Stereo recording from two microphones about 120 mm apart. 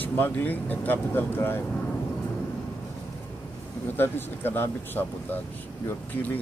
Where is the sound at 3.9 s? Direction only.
20° left (ahead or behind).